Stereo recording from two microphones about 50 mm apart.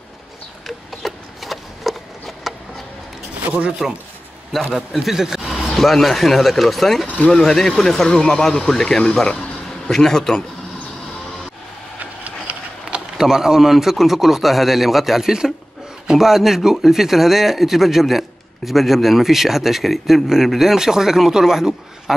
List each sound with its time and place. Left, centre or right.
0.7 s a sound: centre
3.4 s speech: right
4.7 s speech: centre
5.8 s a man's voice: centre
12.9 s a sound: centre
13.2 s a man's voice: centre